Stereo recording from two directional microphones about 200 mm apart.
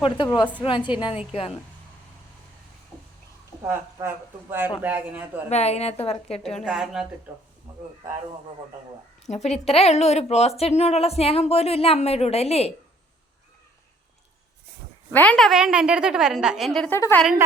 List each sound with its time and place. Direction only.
0.2 s a woman's voice: 25° left (ahead or behind)
3.7 s speech: 10° right (ahead or behind)
5.5 s a woman's voice: 30° left (ahead or behind)
6.4 s a woman's voice: centre (ahead or behind)
9.2 s a woman's voice: 35° left (ahead or behind)
15.1 s a woman's voice: 5° left (ahead or behind)